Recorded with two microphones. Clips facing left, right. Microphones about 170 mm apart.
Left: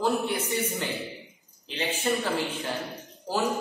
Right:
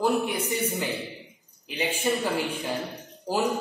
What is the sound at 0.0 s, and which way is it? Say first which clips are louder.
Speech: right 2 dB; 10° right (ahead or behind).